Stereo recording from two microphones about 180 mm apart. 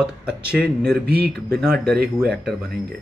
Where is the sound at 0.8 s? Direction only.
60° right (ahead or behind).